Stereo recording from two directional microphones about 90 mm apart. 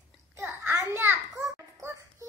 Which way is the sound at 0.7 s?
25° right (ahead or behind).